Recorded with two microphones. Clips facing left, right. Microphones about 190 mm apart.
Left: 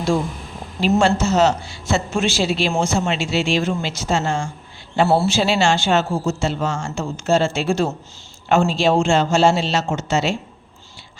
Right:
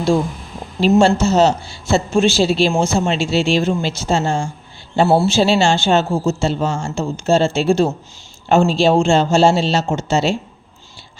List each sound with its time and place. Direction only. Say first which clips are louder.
0.8 s a man's voice: right 4 dB; 30° right (ahead or behind)